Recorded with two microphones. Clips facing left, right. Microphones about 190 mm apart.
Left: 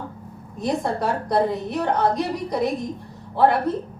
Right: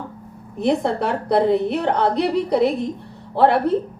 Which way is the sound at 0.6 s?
65° right (ahead or behind).